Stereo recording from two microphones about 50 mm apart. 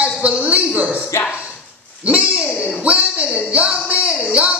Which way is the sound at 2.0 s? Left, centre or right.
Right.